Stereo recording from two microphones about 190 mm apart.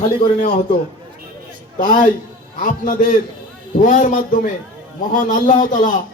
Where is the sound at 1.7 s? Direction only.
45° left (ahead or behind).